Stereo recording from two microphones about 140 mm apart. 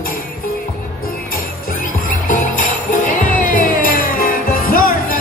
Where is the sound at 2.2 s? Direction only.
70° left (ahead or behind).